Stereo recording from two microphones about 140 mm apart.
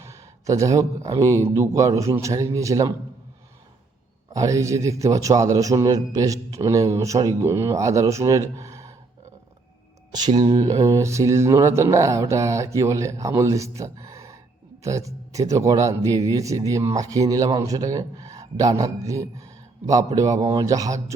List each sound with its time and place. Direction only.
0.0 s a sound: 20° right (ahead or behind)
1.2 s speech: 20° right (ahead or behind)
4.3 s speech: 25° right (ahead or behind)
10.1 s speech: 30° right (ahead or behind)